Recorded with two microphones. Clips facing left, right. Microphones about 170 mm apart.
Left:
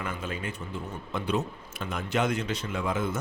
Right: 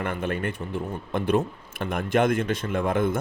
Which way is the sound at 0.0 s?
60° right (ahead or behind).